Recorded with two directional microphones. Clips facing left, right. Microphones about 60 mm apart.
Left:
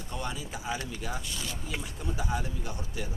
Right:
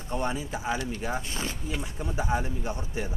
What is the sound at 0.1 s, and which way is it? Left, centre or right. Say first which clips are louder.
Speech: right 7 dB; right.